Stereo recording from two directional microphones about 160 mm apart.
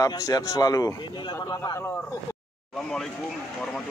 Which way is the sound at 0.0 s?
25° left (ahead or behind).